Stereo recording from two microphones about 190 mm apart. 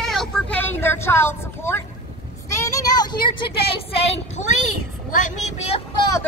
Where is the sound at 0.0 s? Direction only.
Centre (ahead or behind).